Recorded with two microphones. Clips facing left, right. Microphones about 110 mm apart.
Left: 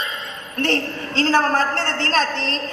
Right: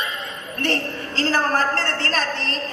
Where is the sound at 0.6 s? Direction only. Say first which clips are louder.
Left 2 dB; 25° left (ahead or behind).